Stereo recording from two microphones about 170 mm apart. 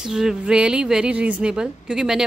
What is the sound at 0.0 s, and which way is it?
A woman's voice, 5° right (ahead or behind).